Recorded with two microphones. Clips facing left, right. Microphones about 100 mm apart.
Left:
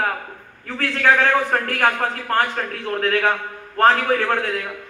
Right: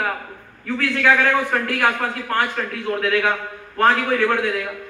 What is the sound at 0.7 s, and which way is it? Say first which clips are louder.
A man's voice: even; 45° left (ahead or behind).